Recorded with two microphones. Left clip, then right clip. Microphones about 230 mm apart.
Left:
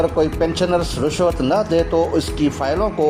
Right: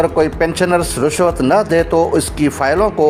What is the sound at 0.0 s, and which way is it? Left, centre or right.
Speech, right.